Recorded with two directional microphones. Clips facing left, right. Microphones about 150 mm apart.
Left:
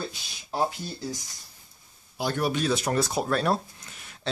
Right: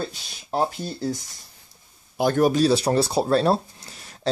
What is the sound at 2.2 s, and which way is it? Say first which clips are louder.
Speech: right 8 dB; 45° right (ahead or behind).